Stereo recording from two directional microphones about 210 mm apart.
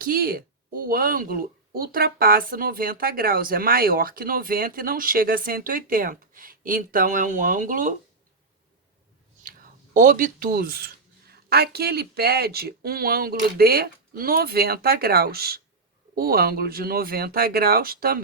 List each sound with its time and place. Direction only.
0.0 s speech: 45° right (ahead or behind)
9.9 s speech: 40° right (ahead or behind)